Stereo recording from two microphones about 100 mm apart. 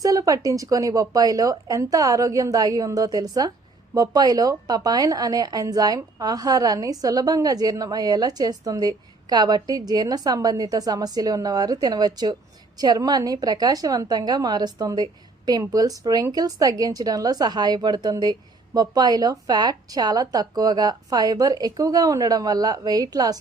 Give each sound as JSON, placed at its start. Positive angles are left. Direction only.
{"t": 0.0, "sound": "a woman's voice", "side_deg": -35}